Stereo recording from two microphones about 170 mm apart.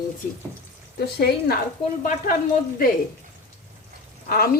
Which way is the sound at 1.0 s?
70° left (ahead or behind).